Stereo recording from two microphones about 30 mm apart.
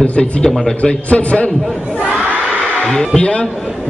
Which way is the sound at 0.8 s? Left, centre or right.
Left.